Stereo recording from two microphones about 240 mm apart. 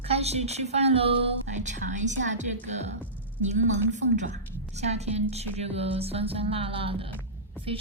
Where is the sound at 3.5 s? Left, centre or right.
Right.